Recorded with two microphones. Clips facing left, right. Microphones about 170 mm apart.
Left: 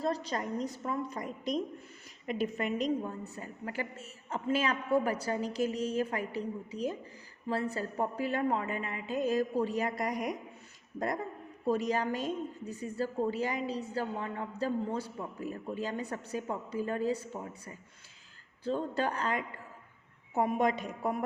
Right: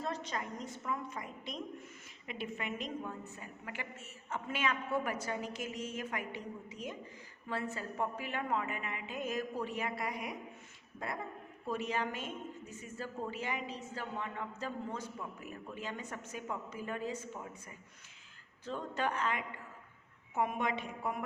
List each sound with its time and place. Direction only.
0.0 s a woman's voice: 35° left (ahead or behind)
11.6 s a woman's voice: 40° left (ahead or behind)
18.6 s a woman's voice: 35° left (ahead or behind)